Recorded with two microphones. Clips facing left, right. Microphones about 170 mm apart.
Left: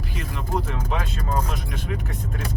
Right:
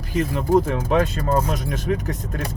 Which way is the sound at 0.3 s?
45° right (ahead or behind).